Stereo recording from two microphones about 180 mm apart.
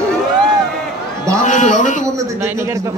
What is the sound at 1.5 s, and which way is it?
Speech, 45° left (ahead or behind).